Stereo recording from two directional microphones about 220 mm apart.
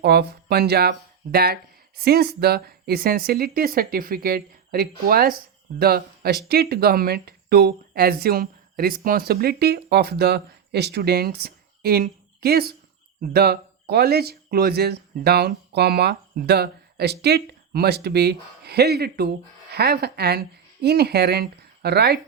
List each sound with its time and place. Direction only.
0.0 s speech: 45° right (ahead or behind)